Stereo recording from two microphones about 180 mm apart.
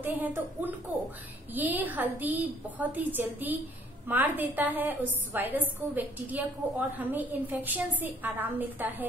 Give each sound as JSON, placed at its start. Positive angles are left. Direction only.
{"t": 0.0, "sound": "a woman's voice", "side_deg": -10}